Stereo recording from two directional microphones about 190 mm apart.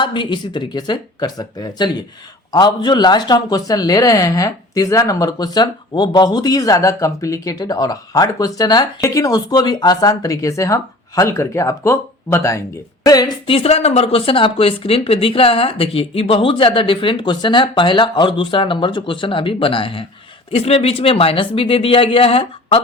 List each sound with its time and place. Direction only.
0.0 s speech: 25° left (ahead or behind)
13.1 s speech: 25° left (ahead or behind)